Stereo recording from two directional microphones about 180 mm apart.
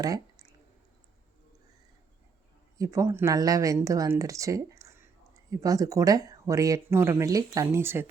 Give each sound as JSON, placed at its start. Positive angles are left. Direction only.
{"t": 0.0, "sound": "speech", "side_deg": -20}
{"t": 2.7, "sound": "speech", "side_deg": -15}